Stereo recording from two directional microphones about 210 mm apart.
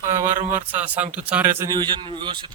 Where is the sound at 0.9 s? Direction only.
5° right (ahead or behind); by 2.5 s 25° right (ahead or behind).